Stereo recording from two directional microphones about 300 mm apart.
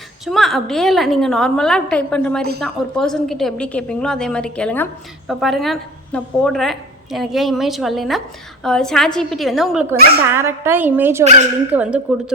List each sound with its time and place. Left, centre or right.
0.3 s a woman's voice: centre
11.2 s speech: right
11.7 s a woman's voice: centre